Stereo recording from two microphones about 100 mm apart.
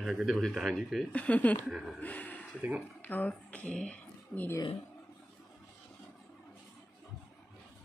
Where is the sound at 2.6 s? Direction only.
15° right (ahead or behind).